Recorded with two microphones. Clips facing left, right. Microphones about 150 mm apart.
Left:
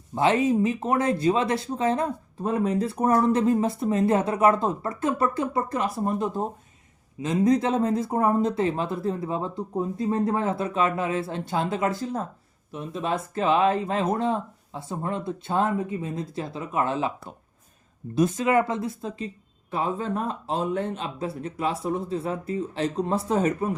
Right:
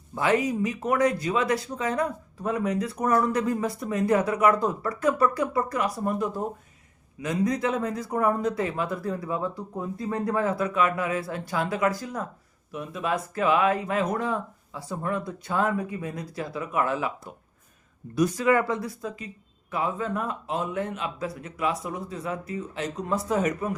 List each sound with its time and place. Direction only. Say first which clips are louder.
0.1 s speech: left 3 dB; 25° left (ahead or behind)
18.1 s a man's voice: left 1 dB; 25° left (ahead or behind)